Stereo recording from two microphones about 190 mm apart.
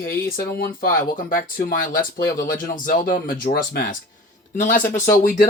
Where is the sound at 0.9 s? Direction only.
45° left (ahead or behind).